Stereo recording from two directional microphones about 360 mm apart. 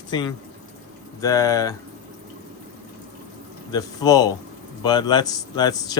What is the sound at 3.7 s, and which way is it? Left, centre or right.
A man's voice, centre.